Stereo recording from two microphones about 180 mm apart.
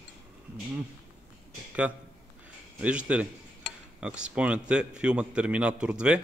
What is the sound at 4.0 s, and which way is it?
A man's voice, 5° right (ahead or behind).